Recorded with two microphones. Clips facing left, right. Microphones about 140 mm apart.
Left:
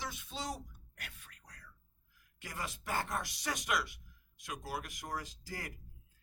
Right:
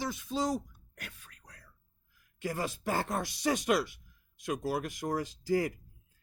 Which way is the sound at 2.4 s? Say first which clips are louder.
Right 10 dB; 30° right (ahead or behind).